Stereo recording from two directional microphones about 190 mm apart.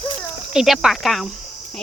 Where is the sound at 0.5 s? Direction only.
Centre (ahead or behind).